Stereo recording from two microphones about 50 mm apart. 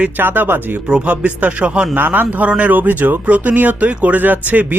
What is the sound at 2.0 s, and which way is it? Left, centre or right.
Speech, right.